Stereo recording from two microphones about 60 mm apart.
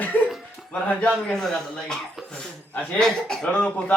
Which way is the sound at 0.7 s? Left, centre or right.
Centre.